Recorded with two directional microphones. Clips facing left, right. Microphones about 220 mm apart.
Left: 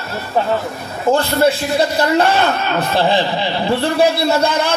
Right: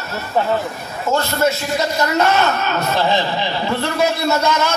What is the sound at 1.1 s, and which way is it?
A man's voice, 30° left (ahead or behind).